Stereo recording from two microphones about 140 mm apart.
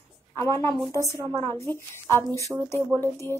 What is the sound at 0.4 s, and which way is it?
Speech, 20° left (ahead or behind).